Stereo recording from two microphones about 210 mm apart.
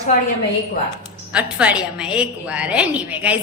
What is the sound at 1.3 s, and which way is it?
A woman's voice, 5° right (ahead or behind).